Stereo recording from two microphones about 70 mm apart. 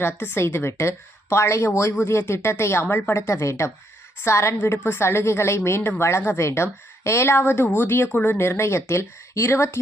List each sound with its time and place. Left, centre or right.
0.0 s speech: left